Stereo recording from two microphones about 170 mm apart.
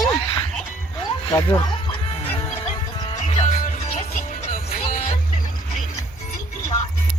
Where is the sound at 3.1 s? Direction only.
40° left (ahead or behind).